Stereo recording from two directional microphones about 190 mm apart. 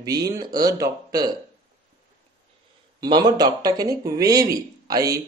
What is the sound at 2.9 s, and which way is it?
Speech, 20° right (ahead or behind).